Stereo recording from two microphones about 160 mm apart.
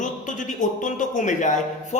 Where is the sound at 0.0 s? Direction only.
50° left (ahead or behind).